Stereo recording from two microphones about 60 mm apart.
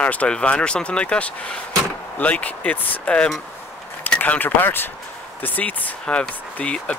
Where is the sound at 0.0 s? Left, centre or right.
Left.